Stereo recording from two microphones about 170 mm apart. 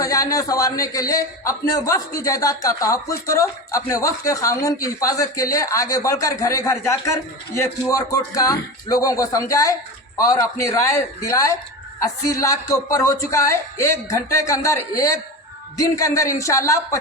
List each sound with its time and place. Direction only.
0.0 s a man's voice: 20° left (ahead or behind)